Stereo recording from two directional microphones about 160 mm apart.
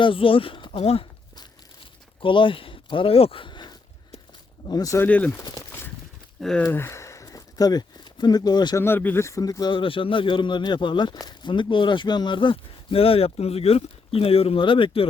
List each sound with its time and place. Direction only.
0.0 s speech: 35° left (ahead or behind)
5.0 s speech: 10° left (ahead or behind)
6.4 s speech: 5° left (ahead or behind)
6.7 s a sound: 15° left (ahead or behind)
8.8 s speech: 15° left (ahead or behind); by 15.0 s 30° left (ahead or behind)